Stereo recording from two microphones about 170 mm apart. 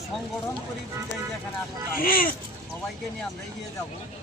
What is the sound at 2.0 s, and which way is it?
Speech, 55° left (ahead or behind).